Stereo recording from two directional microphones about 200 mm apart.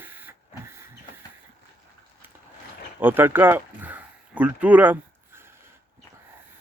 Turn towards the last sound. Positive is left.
turn(degrees=-10)  # may be behind; listen again after turning